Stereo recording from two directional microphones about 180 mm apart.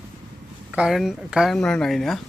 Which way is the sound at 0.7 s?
Centre (ahead or behind).